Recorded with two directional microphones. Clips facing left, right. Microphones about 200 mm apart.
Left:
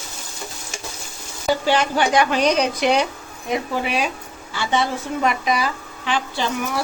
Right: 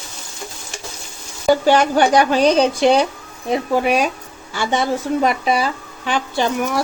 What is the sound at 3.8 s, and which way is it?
A woman's voice, 45° right (ahead or behind).